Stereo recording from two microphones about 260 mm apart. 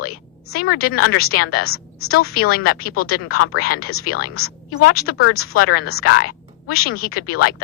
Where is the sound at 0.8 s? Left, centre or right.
Left.